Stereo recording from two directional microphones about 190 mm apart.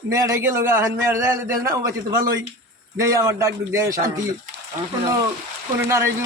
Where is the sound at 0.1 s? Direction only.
15° right (ahead or behind).